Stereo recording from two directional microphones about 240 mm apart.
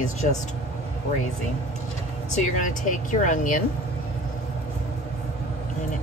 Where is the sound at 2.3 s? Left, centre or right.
Left.